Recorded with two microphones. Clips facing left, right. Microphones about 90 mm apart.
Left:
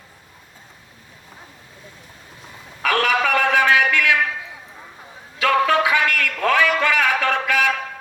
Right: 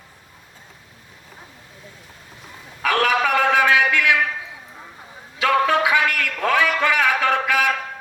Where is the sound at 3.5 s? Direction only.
15° right (ahead or behind).